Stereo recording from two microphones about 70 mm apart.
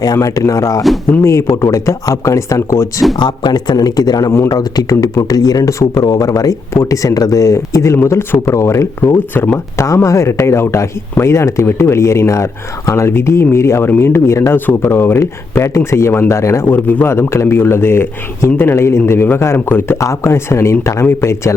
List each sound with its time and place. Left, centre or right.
0.0 s speech: left
1.2 s speech: left
3.2 s speech: left
9.7 s speech: left
13.1 s speech: left
16.6 s a man's voice: left
17.1 s speech: left
20.0 s speech: left